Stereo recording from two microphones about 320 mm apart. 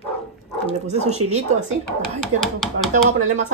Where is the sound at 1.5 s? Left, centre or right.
Right.